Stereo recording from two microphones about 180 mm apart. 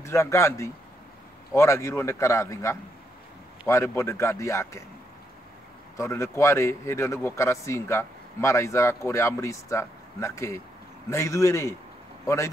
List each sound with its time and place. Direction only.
0.0 s a man's voice: 15° left (ahead or behind)
5.9 s a man's voice: 15° left (ahead or behind)